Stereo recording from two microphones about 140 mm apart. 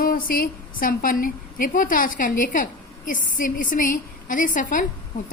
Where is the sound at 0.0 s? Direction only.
90° left.